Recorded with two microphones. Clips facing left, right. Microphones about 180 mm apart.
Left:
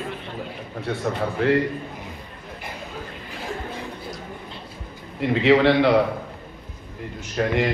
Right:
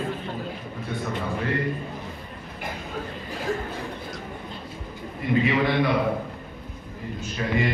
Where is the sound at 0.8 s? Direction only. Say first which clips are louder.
Left 6 dB; 75° left (ahead or behind).